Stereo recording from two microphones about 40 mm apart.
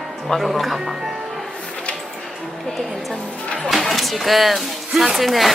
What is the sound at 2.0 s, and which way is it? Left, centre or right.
Music, centre.